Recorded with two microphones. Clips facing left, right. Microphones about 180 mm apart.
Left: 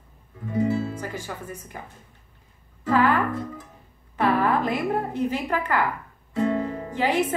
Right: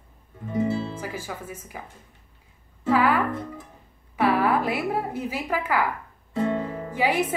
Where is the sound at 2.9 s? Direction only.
10° right (ahead or behind).